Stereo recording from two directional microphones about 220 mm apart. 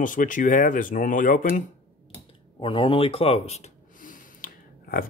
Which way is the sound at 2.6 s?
20° left (ahead or behind).